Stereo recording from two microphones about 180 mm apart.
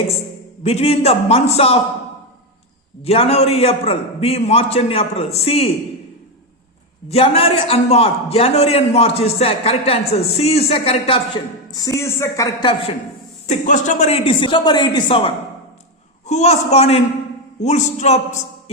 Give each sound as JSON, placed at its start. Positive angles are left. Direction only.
{"t": 0.6, "sound": "a man's voice", "side_deg": 35}
{"t": 3.0, "sound": "a man's voice", "side_deg": 35}
{"t": 7.1, "sound": "a man's voice", "side_deg": 35}
{"t": 11.7, "sound": "speech", "side_deg": 20}
{"t": 13.5, "sound": "speech", "side_deg": 45}
{"t": 16.2, "sound": "a man's voice", "side_deg": 40}